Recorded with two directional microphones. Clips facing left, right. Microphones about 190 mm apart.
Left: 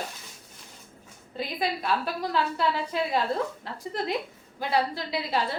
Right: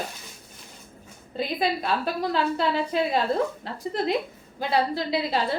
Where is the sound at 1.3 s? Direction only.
25° right (ahead or behind).